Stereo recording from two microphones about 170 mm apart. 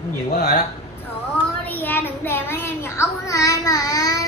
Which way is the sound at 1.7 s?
10° left (ahead or behind).